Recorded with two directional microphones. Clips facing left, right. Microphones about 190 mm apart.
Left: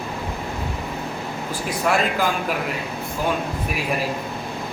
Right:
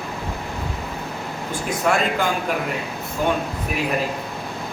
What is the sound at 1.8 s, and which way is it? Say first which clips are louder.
Speech: even; 5° left (ahead or behind).